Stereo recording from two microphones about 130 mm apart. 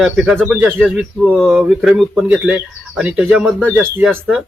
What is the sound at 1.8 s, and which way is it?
Speech, centre (ahead or behind).